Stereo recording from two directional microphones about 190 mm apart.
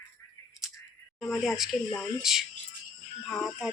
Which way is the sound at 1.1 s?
Centre (ahead or behind).